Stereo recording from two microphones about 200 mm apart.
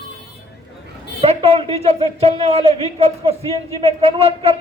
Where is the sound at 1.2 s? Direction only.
30° right (ahead or behind).